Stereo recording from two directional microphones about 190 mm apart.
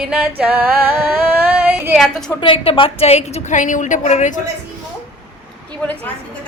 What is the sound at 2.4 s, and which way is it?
A woman's voice, 30° left (ahead or behind).